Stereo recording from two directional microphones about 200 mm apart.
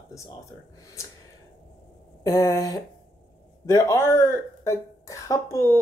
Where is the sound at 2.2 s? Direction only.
15° left (ahead or behind).